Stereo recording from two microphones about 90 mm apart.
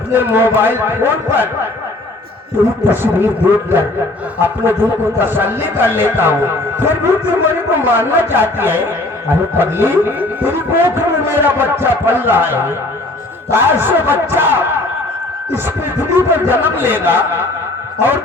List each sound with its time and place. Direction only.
0.1 s speech: 25° right (ahead or behind)
2.8 s speech: 25° right (ahead or behind)
16.1 s speech: 25° right (ahead or behind)